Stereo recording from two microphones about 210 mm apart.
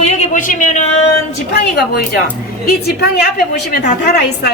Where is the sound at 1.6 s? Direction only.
50° left (ahead or behind).